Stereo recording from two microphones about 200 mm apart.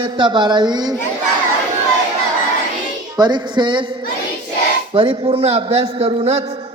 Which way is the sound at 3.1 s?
20° right (ahead or behind).